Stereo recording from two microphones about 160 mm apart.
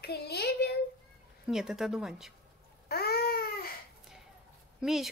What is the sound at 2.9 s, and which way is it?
Babbling, 80° left.